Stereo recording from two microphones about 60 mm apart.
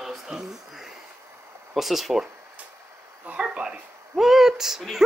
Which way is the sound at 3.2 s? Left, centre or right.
Centre.